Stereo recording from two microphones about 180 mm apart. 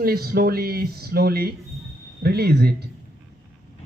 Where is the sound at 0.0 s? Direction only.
60° right (ahead or behind).